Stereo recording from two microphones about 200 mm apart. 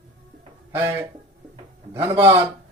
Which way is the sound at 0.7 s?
10° right (ahead or behind).